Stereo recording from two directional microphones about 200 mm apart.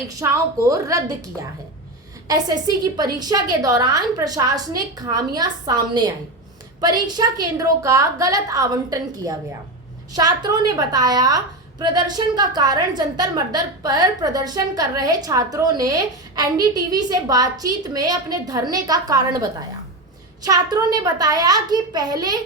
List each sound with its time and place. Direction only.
0.1 s a woman's voice: 15° right (ahead or behind)